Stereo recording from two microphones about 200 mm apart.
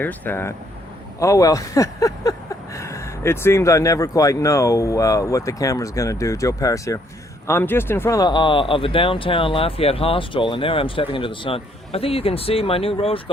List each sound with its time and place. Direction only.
0.0 s speech: 10° left (ahead or behind); by 13.3 s 25° left (ahead or behind)